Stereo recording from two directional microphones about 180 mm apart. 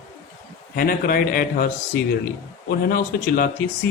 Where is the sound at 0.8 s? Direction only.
50° left (ahead or behind).